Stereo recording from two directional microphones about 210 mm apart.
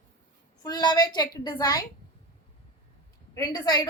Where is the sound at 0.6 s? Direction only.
20° left (ahead or behind).